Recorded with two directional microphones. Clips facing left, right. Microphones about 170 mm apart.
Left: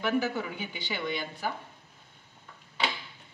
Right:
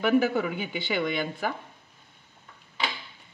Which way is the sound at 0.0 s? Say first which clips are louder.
Right 6 dB; 55° right (ahead or behind).